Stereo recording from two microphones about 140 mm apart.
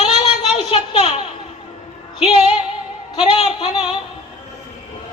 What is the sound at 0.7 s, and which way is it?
Speech, 45° left (ahead or behind).